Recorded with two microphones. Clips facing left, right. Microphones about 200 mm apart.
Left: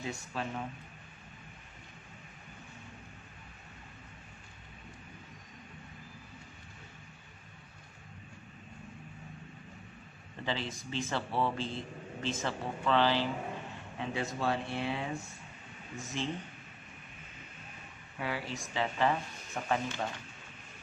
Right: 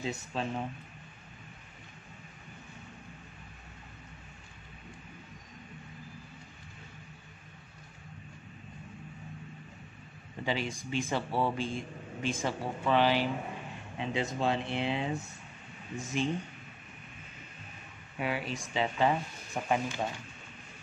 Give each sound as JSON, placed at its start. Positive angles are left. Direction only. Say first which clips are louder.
{"t": 0.0, "sound": "speech", "louder": "right 3 dB", "side_deg": -25}
{"t": 10.4, "sound": "a man's voice", "louder": "right 3 dB", "side_deg": -15}
{"t": 18.1, "sound": "a man's voice", "louder": "right 3 dB", "side_deg": -20}